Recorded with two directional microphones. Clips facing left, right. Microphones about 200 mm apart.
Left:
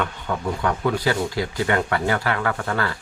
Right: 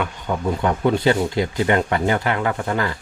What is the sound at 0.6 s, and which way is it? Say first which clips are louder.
Speech: right 4 dB; 25° right (ahead or behind).